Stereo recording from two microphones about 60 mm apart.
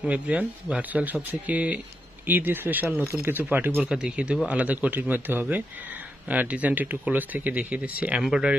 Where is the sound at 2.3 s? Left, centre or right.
Right.